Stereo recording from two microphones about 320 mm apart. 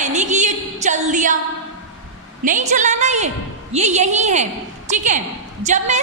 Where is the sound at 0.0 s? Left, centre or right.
Right.